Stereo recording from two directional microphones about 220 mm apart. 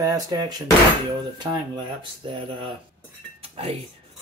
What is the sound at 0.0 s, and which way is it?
Speech, 15° right (ahead or behind).